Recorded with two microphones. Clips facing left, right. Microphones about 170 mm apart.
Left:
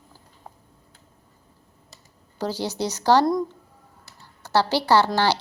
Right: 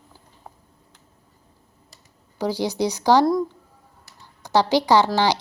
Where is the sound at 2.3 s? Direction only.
15° right (ahead or behind).